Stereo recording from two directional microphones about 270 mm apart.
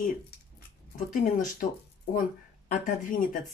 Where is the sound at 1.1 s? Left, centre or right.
Left.